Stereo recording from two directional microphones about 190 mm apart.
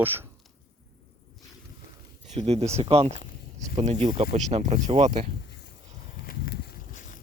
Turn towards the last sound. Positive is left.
turn(degrees=45)  # may be behind; listen again after turning